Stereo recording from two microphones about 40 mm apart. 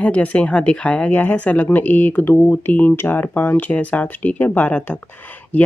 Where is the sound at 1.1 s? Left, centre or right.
Left.